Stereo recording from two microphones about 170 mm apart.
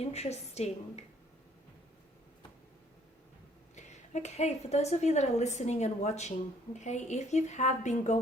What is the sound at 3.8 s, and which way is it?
A woman's voice, 45° left (ahead or behind).